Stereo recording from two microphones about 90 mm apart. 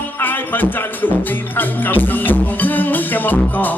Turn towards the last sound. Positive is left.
turn(degrees=20)  # may be behind; listen again after turning